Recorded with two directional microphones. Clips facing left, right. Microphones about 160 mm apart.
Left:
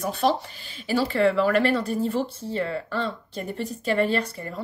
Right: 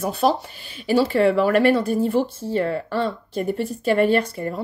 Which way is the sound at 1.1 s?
50° right (ahead or behind).